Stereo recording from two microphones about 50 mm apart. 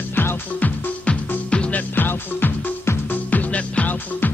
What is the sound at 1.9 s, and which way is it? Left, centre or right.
Music, left.